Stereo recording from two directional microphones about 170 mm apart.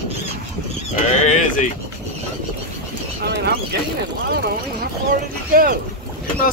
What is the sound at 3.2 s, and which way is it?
Speech, 70° right (ahead or behind).